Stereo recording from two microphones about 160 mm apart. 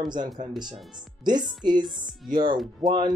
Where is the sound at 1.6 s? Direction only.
30° right (ahead or behind).